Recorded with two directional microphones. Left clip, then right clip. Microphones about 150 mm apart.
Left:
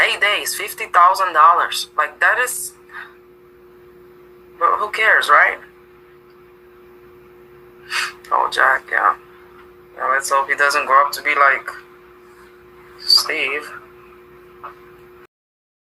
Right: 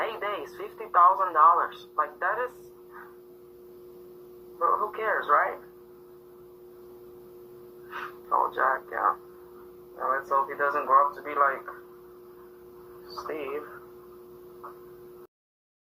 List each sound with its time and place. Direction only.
0.0 s speech: 20° left (ahead or behind)
4.5 s speech: 30° left (ahead or behind)
7.9 s speech: 30° left (ahead or behind)
13.1 s speech: 20° left (ahead or behind)